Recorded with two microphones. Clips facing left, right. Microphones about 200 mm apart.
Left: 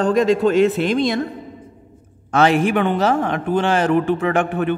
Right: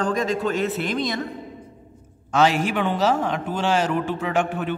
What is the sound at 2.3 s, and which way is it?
A woman's voice, 55° left (ahead or behind).